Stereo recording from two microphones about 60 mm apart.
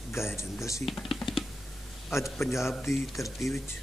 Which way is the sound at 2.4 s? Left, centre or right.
Left.